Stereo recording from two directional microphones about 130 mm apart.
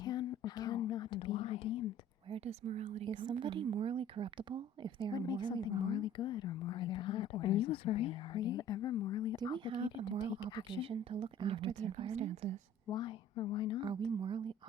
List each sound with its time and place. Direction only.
0.0 s whispering: 30° left (ahead or behind)
1.2 s whispering: 45° left (ahead or behind)
2.3 s speech: 55° right (ahead or behind)
3.0 s speech: 40° right (ahead or behind)
5.1 s speech: 30° left (ahead or behind); by 8.4 s 50° left (ahead or behind)
8.4 s speech: 30° left (ahead or behind)
9.6 s speech: 40° right (ahead or behind)
10.2 s speech: 35° left (ahead or behind)
10.8 s speech: 45° right (ahead or behind)
11.7 s speech: 65° right (ahead or behind)
12.9 s speech: 35° left (ahead or behind)
14.2 s speech: 40° right (ahead or behind)